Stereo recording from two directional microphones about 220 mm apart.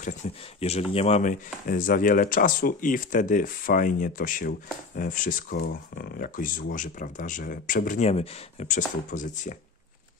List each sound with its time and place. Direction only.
0.2 s speech: 30° left (ahead or behind)